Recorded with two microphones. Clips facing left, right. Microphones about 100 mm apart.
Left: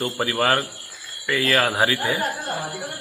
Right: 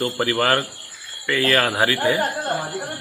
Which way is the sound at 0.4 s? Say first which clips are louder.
Left 1 dB; centre (ahead or behind).